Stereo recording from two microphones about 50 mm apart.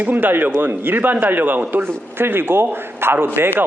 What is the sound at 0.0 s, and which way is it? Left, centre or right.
A man's voice, right.